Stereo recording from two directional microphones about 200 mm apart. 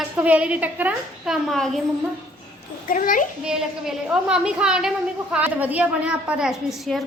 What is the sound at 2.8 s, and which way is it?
Speech, 40° left (ahead or behind).